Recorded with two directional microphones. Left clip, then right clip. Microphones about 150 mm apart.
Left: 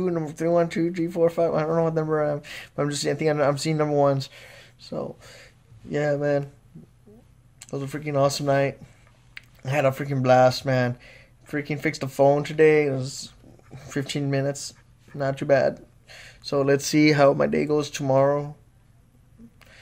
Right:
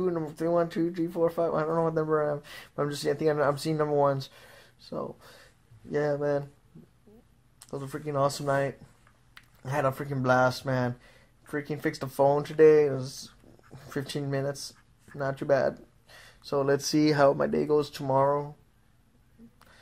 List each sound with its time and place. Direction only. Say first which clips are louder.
0.0 s speech: left 4 dB; 15° left (ahead or behind)
7.5 s speech: left 5 dB; 5° left (ahead or behind)
11.0 s a sound: left 8 dB; 5° left (ahead or behind)
11.6 s speech: left 5 dB; 5° left (ahead or behind)
18.0 s speech: left 8 dB; 20° left (ahead or behind)